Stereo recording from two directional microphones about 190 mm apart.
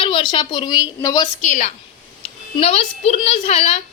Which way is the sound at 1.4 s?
40° left (ahead or behind).